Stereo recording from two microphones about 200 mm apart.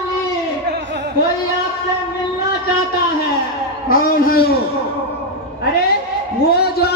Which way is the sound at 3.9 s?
45° left (ahead or behind).